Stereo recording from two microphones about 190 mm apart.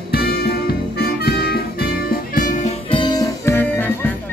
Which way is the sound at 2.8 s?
25° left (ahead or behind).